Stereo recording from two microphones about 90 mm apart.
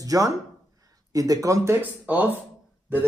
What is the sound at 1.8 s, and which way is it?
Speech, 20° right (ahead or behind).